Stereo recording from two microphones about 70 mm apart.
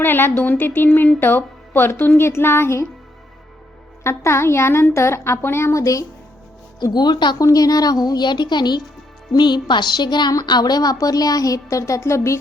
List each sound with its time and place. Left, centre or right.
0.0 s speech: left
4.0 s speech: left
6.9 s speech: left
7.3 s speech: left